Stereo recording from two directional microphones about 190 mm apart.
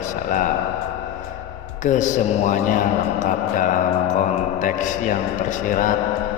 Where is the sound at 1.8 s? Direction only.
40° left (ahead or behind).